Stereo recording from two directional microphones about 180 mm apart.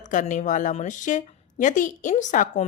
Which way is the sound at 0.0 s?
45° left (ahead or behind).